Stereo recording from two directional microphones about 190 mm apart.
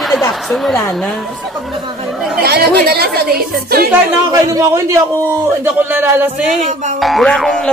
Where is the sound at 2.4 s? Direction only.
55° right (ahead or behind).